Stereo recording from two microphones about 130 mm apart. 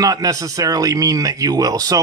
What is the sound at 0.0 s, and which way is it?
Speech, 25° right (ahead or behind).